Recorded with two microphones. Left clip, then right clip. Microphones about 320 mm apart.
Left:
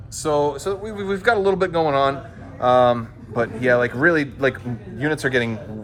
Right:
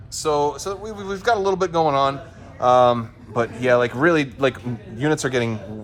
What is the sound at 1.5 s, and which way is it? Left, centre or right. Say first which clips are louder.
Speech: even; right.